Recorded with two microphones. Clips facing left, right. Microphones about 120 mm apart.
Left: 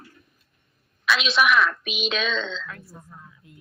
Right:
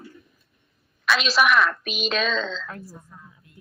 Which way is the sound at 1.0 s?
Centre (ahead or behind).